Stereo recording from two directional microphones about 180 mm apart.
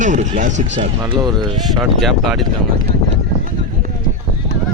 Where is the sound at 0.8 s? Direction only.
25° right (ahead or behind).